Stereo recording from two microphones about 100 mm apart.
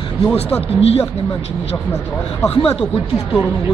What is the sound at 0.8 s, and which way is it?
Speech, 90° left.